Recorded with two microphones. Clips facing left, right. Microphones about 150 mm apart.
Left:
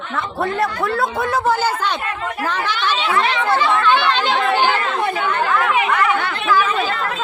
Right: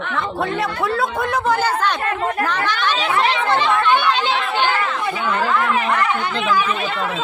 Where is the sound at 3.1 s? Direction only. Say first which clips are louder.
Even; 30° right (ahead or behind).